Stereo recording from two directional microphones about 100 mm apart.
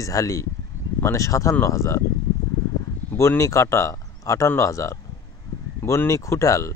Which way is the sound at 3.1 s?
30° left (ahead or behind).